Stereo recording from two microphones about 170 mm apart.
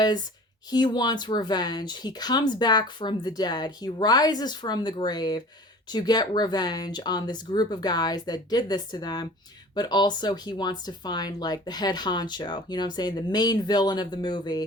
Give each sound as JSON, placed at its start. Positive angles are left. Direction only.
{"t": 0.7, "sound": "speech", "side_deg": 25}